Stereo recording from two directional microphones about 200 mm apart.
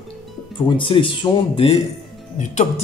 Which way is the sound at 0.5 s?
25° left (ahead or behind).